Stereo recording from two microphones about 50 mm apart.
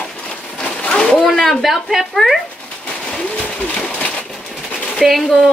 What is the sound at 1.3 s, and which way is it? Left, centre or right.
Speech, centre.